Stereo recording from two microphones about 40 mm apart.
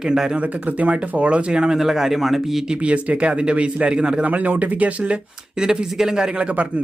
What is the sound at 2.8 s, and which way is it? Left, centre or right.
Speech, right.